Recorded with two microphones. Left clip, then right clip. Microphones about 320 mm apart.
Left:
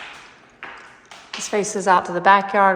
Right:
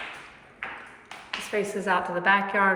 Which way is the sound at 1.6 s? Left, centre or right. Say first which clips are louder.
Left 8 dB; centre.